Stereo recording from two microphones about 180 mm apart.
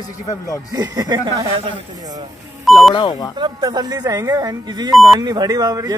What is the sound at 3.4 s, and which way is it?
Speech, 20° right (ahead or behind).